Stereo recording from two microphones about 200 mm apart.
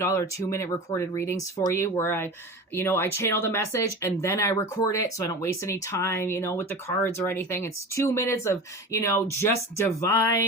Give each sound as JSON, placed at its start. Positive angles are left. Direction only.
{"t": 0.0, "sound": "speech", "side_deg": 15}